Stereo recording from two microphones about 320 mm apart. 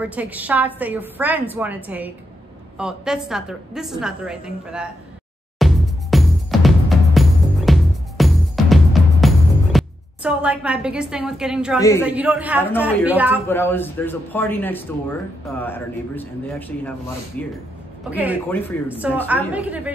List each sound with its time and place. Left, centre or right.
0.0 s a woman's voice: centre
5.6 s music: centre
12.0 s a woman's voice: centre
13.5 s a man's voice: centre
18.5 s a woman's voice: centre
18.9 s a woman's voice: centre